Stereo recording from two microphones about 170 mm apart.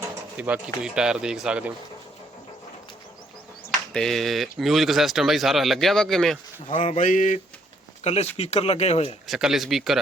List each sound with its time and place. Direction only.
0.3 s speech: 10° right (ahead or behind)
3.9 s speech: centre (ahead or behind)
6.7 s mantra: 45° left (ahead or behind)
8.0 s speech: 40° left (ahead or behind)
9.2 s speech: centre (ahead or behind)